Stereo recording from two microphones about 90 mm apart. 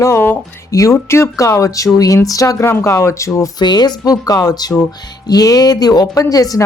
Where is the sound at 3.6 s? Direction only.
50° left (ahead or behind).